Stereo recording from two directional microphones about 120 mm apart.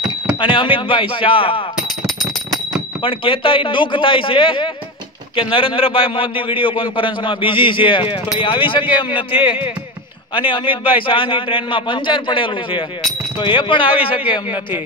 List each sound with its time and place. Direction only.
0.4 s a man's voice: 45° left (ahead or behind)
3.0 s a man's voice: 45° left (ahead or behind)